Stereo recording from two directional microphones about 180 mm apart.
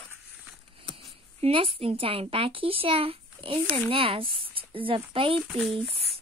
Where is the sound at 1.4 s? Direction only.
30° right (ahead or behind).